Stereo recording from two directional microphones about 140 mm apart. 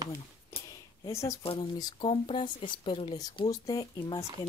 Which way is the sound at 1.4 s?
40° left (ahead or behind).